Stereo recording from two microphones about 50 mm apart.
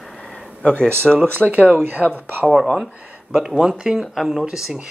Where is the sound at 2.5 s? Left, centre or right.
Centre.